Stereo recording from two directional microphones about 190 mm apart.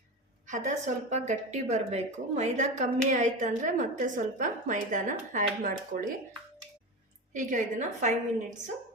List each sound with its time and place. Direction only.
0.4 s speech: 40° right (ahead or behind)
7.3 s speech: 40° right (ahead or behind)